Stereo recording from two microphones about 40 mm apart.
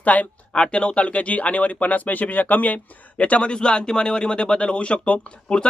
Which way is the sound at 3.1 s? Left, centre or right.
Left.